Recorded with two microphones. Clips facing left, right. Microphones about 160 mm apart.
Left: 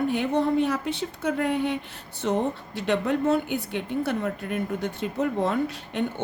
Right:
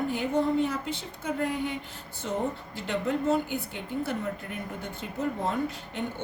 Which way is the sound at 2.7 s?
70° left (ahead or behind).